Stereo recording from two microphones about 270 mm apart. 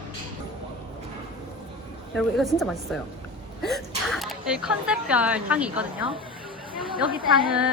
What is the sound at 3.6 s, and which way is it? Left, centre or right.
Speech, centre.